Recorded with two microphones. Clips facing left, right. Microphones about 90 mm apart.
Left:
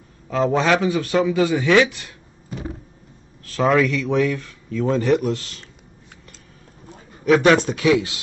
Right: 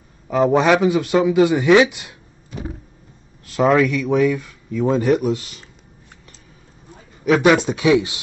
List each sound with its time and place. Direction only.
0.3 s speech: 15° right (ahead or behind)
3.6 s speech: 5° right (ahead or behind)
7.2 s speech: 5° right (ahead or behind)
7.6 s speech: 20° right (ahead or behind)